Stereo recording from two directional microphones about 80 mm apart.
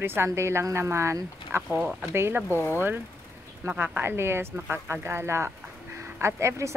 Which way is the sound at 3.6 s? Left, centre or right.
Right.